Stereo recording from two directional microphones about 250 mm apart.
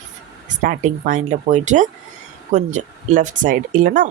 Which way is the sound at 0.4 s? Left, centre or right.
Right.